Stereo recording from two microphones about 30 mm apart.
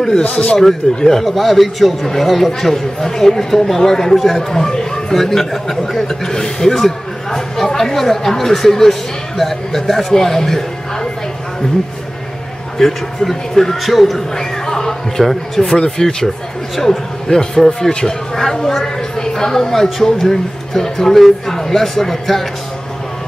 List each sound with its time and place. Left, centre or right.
0.6 s a man's voice: centre
12.7 s speech: centre
14.3 s a sound: centre
15.6 s speech: left
16.0 s a man's voice: centre